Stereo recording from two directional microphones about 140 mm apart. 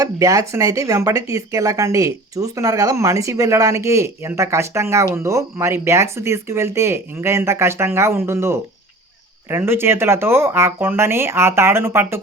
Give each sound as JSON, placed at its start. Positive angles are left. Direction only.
{"t": 0.0, "sound": "speech", "side_deg": -25}